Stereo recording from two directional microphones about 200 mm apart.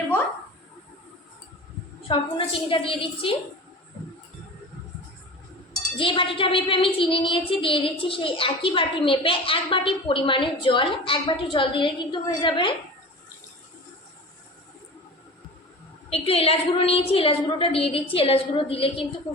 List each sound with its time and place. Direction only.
2.1 s speech: 25° left (ahead or behind)
6.0 s speech: 25° left (ahead or behind)
16.0 s speech: 30° left (ahead or behind)